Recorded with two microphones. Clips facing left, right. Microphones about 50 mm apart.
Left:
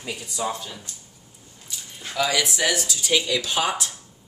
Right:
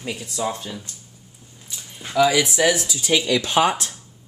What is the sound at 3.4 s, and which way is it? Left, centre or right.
Speech, right.